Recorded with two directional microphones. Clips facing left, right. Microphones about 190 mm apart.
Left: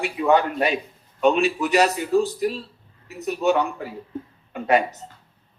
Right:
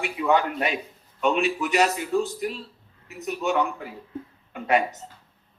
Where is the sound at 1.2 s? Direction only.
35° left (ahead or behind).